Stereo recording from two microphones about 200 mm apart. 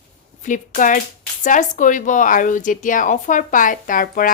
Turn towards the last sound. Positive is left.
turn(degrees=45)  # may be behind; listen again after turning